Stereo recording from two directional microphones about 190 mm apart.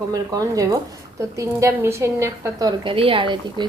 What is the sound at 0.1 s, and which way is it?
A woman's voice, 20° right (ahead or behind).